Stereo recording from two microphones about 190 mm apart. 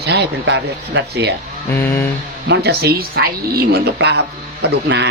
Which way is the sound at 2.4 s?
60° right (ahead or behind).